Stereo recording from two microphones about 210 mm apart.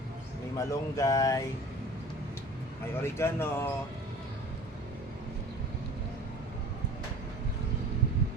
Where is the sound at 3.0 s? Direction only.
10° left (ahead or behind).